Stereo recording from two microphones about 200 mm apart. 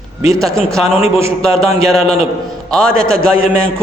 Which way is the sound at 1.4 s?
Centre (ahead or behind).